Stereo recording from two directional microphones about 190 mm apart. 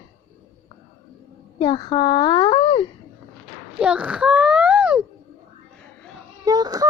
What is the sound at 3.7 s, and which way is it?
A child's voice, 5° right (ahead or behind).